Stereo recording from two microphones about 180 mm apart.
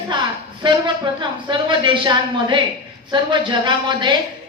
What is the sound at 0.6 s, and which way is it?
A woman's voice, 25° right (ahead or behind).